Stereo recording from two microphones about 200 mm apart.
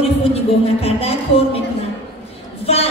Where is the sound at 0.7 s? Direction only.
30° left (ahead or behind).